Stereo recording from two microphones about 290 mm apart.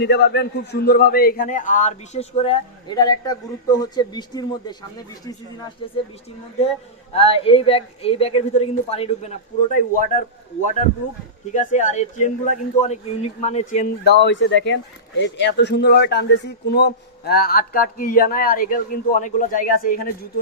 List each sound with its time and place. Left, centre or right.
0.0 s a man's voice: left; by 5.9 s centre
7.1 s a man's voice: centre
11.5 s a man's voice: left